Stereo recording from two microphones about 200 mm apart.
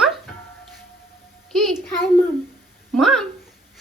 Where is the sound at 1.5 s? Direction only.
Centre (ahead or behind).